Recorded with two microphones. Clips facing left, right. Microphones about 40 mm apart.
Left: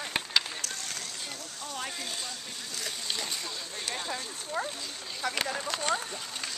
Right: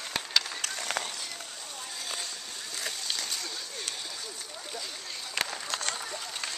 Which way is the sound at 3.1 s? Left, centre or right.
Centre.